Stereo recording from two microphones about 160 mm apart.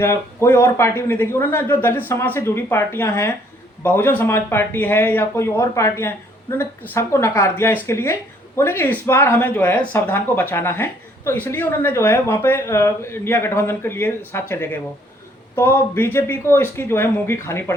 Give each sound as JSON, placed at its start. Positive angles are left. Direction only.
{"t": 0.0, "sound": "speech", "side_deg": 15}